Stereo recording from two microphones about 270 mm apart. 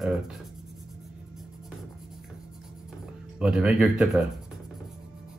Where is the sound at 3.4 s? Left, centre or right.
Centre.